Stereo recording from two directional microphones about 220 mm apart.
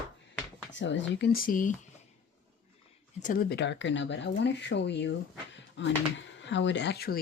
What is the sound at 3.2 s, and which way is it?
Speech, 40° left (ahead or behind).